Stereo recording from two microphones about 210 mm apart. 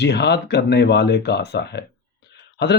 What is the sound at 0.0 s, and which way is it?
Speech, 55° left (ahead or behind).